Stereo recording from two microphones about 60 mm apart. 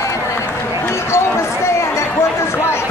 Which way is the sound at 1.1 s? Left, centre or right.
Left.